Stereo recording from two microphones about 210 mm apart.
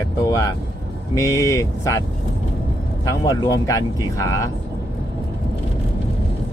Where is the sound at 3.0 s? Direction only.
15° left (ahead or behind).